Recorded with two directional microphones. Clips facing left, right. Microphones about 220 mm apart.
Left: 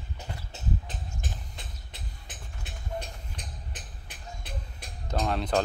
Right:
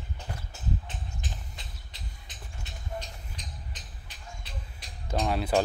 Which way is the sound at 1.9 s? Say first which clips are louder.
Left 2 dB; 50° left (ahead or behind).